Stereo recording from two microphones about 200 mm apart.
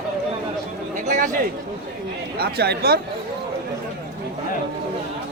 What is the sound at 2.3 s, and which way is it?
Speech, 50° right (ahead or behind).